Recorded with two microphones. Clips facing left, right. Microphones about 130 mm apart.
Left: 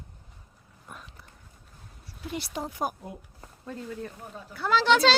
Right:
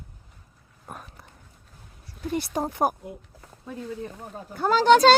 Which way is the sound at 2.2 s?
50° right (ahead or behind).